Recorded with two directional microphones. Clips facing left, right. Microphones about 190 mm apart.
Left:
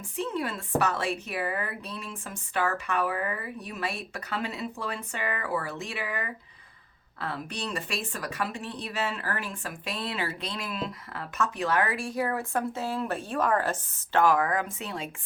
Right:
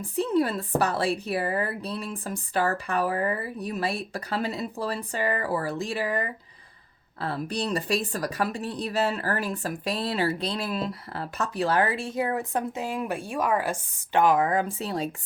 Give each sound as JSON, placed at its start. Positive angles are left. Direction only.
{"t": 0.0, "sound": "speech", "side_deg": -35}